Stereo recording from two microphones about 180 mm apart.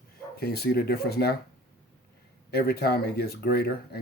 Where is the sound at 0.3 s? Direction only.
60° left (ahead or behind).